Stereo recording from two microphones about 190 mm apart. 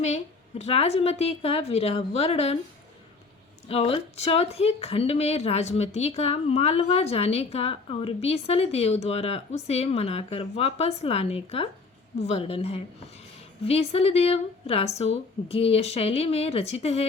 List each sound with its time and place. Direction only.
0.6 s speech: 35° left (ahead or behind)
3.7 s speech: 30° left (ahead or behind)